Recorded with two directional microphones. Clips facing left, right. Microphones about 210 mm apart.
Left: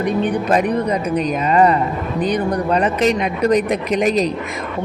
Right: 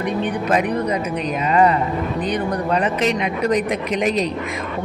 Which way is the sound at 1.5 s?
40° left (ahead or behind).